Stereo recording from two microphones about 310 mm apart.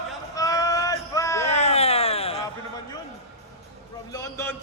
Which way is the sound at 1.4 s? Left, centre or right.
Centre.